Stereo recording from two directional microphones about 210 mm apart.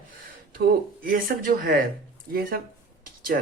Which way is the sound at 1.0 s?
45° right (ahead or behind).